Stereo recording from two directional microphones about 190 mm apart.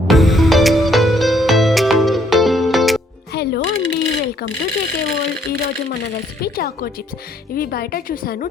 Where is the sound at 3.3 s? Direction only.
60° left (ahead or behind).